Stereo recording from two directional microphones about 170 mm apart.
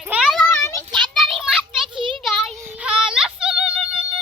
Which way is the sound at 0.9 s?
Centre (ahead or behind).